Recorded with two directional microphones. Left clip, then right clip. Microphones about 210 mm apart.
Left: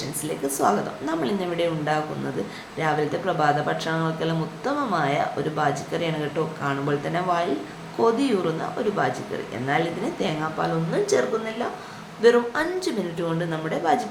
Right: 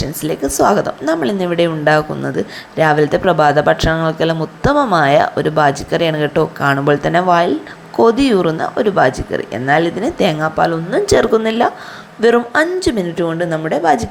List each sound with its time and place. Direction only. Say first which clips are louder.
0.2 s speech: right 10 dB; 35° right (ahead or behind)